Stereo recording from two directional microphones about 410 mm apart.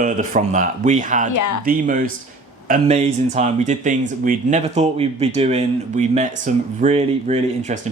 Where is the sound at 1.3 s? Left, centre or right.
Left.